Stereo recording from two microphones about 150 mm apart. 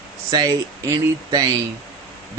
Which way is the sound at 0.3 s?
25° right (ahead or behind).